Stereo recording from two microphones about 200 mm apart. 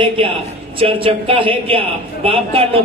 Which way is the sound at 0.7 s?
25° right (ahead or behind).